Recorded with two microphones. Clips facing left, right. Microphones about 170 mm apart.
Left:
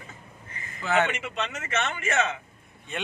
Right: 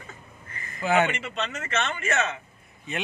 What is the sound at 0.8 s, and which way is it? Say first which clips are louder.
Speech: right 2 dB; 10° right (ahead or behind).